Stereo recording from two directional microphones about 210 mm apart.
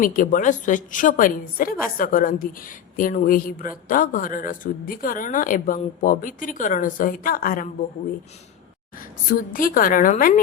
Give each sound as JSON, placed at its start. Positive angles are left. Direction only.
{"t": 0.0, "sound": "a man's voice", "side_deg": 40}
{"t": 9.5, "sound": "a man's voice", "side_deg": 40}